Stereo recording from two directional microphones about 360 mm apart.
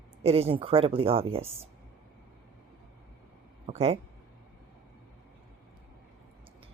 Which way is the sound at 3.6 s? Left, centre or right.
Centre.